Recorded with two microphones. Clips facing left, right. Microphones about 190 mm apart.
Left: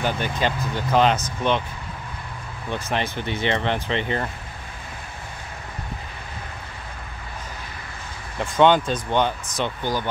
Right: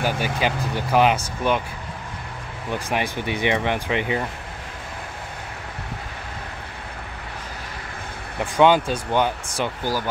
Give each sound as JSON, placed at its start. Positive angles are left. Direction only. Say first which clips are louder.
{"t": 0.0, "sound": "speech", "louder": "right 1 dB", "side_deg": -10}
{"t": 2.7, "sound": "speech", "louder": "right 1 dB", "side_deg": -10}
{"t": 8.4, "sound": "speech", "louder": "even", "side_deg": -10}